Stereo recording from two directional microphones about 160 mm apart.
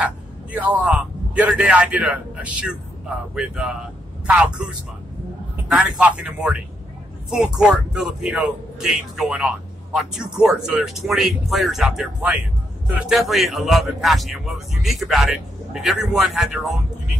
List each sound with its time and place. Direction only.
0.5 s a man's voice: 10° right (ahead or behind)